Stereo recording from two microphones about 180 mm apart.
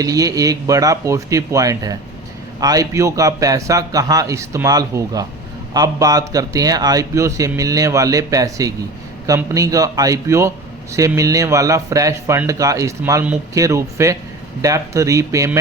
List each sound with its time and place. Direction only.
0.0 s a man's voice: 20° right (ahead or behind)